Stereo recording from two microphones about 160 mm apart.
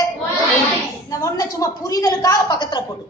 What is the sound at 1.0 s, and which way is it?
A woman's voice, 20° left (ahead or behind).